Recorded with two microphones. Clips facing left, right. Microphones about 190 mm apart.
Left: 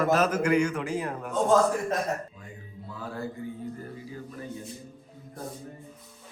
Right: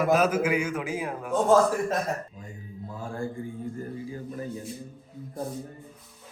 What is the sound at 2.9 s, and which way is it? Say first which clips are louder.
Mantra: right 2 dB; 45° right (ahead or behind).